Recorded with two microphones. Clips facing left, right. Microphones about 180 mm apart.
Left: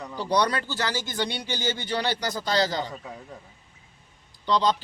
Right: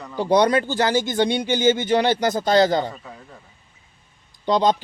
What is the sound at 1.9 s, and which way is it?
Speech, 50° right (ahead or behind).